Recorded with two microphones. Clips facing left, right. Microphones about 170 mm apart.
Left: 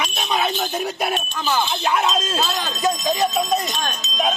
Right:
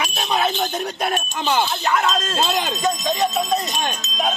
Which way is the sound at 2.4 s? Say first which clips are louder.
Right 3 dB; 20° right (ahead or behind).